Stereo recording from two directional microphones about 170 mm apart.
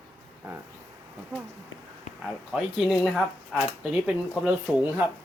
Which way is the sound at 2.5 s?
Centre (ahead or behind).